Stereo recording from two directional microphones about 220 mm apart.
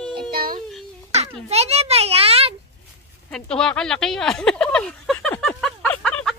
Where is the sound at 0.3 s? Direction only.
40° right (ahead or behind).